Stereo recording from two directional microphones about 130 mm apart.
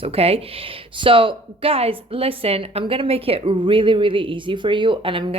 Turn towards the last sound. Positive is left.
turn(degrees=-40)  # may be behind; listen again after turning